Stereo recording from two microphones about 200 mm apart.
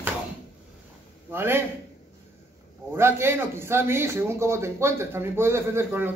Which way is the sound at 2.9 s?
10° right (ahead or behind).